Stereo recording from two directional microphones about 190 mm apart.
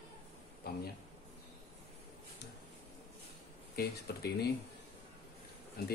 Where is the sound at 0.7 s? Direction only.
55° left (ahead or behind).